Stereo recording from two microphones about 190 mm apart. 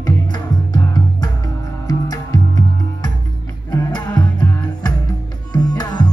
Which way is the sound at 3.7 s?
20° left (ahead or behind).